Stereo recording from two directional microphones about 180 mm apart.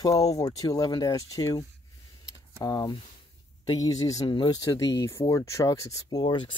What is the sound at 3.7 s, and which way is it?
Speech, 20° left (ahead or behind).